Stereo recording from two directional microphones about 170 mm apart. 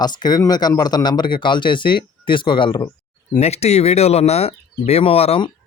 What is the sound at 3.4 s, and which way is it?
Speech, 40° left (ahead or behind).